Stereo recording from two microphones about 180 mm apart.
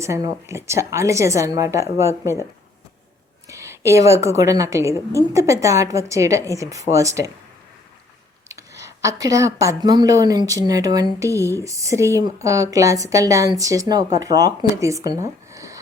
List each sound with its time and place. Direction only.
0.0 s speech: 15° right (ahead or behind)
3.5 s speech: 15° right (ahead or behind)
8.4 s speech: 20° right (ahead or behind)